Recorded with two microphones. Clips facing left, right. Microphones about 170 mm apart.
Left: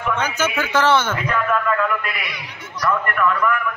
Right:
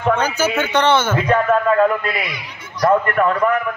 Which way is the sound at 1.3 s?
45° right (ahead or behind).